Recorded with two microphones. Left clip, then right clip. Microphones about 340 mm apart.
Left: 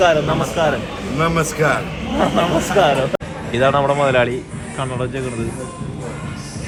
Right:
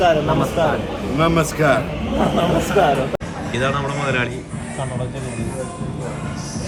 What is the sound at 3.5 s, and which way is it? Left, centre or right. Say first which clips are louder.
Speech: left 7 dB; centre.